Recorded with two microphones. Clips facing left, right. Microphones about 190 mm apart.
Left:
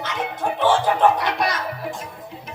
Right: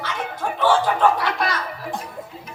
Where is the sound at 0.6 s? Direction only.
20° left (ahead or behind).